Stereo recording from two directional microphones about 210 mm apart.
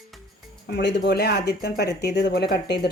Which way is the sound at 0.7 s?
55° left (ahead or behind).